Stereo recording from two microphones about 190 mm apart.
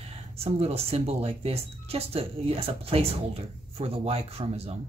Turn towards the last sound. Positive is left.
turn(degrees=-30)  # may be behind; listen again after turning